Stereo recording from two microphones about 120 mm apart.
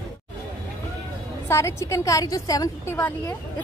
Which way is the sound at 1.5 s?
25° left (ahead or behind).